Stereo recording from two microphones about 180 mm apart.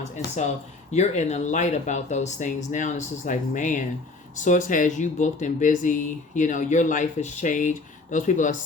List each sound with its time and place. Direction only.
0.9 s speech: 40° left (ahead or behind)